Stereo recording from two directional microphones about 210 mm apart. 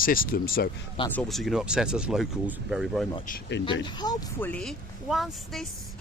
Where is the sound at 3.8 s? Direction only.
20° left (ahead or behind).